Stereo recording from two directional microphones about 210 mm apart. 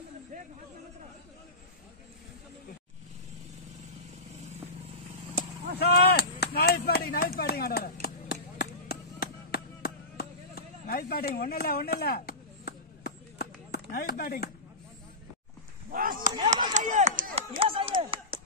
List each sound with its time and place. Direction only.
5.8 s artillery fire: 50° left (ahead or behind)
6.4 s chop: 50° left (ahead or behind)
6.9 s a sound: 45° left (ahead or behind)
15.9 s chop: 40° right (ahead or behind)
17.4 s chop: 25° right (ahead or behind)
18.3 s a sound: 45° right (ahead or behind)